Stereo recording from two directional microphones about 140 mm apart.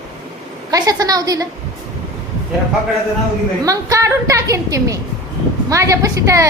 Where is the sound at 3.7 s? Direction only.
25° right (ahead or behind).